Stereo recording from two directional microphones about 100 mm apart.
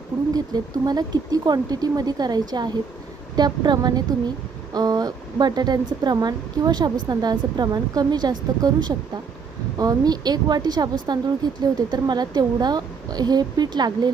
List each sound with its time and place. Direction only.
0.3 s speech: 40° right (ahead or behind)